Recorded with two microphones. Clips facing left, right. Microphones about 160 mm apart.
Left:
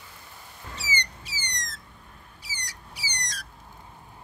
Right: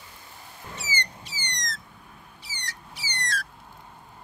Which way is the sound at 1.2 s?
10° left (ahead or behind).